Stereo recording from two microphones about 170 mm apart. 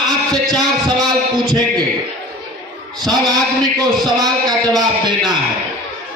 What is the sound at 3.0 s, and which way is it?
A man's voice, 25° right (ahead or behind).